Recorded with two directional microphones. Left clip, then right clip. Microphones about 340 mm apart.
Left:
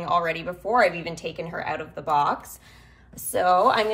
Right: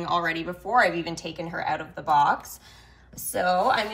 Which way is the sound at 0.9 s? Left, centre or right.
Centre.